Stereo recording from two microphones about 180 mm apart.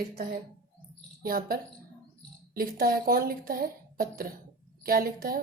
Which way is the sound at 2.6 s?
55° right (ahead or behind).